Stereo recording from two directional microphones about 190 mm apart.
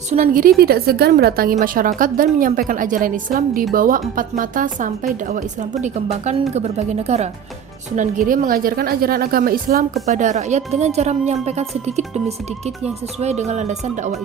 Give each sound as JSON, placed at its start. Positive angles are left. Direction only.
{"t": 0.1, "sound": "a woman's voice", "side_deg": -45}
{"t": 7.9, "sound": "a woman's voice", "side_deg": -45}
{"t": 10.1, "sound": "speech", "side_deg": -40}
{"t": 13.2, "sound": "speech", "side_deg": -35}